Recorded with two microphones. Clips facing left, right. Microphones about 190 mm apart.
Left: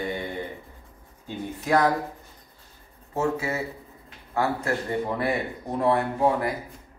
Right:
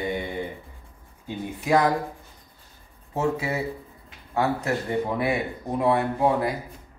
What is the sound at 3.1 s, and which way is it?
Speech, 15° right (ahead or behind).